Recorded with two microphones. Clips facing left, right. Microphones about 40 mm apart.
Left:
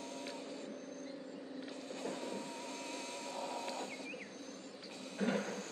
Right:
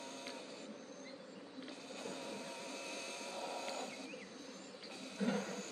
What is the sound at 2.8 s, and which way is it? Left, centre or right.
Vehicle, left.